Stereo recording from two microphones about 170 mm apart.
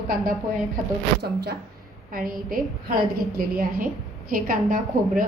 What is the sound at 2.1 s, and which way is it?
A woman's voice, 55° right (ahead or behind).